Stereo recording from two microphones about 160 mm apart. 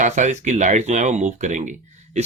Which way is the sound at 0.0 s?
50° right (ahead or behind).